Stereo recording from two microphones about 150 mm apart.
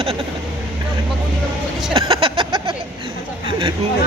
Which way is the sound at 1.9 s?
40° right (ahead or behind).